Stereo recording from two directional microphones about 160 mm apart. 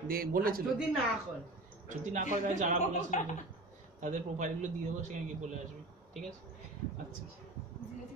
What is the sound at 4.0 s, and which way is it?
A man's voice, 50° right (ahead or behind).